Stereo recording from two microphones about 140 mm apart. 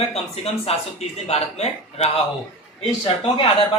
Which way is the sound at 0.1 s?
45° left (ahead or behind).